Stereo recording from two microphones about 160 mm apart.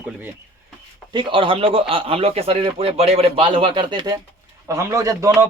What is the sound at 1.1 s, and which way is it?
A man's voice, 30° right (ahead or behind).